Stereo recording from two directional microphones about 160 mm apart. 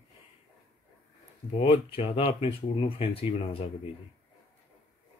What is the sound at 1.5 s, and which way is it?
Speech, 35° left (ahead or behind).